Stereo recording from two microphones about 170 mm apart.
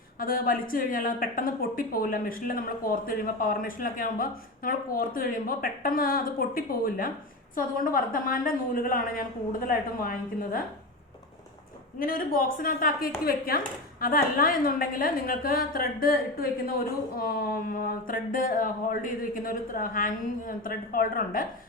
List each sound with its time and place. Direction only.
0.2 s a woman's voice: 55° left (ahead or behind)
11.9 s a woman's voice: 55° left (ahead or behind)